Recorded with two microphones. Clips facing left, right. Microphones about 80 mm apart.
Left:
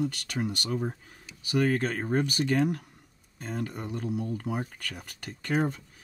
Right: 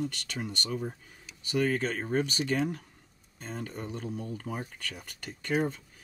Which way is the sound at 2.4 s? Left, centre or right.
Centre.